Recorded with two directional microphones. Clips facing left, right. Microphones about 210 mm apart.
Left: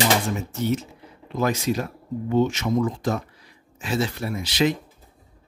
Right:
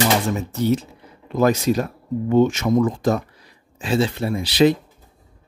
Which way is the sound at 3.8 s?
30° right (ahead or behind).